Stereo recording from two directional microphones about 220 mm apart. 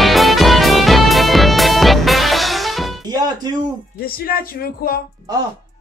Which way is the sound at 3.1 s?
20° right (ahead or behind).